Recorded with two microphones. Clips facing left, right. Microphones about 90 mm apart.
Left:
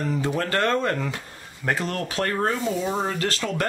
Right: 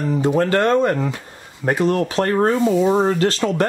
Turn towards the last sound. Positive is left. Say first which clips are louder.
# right 8 dB
turn(degrees=-30)  # may be behind; listen again after turning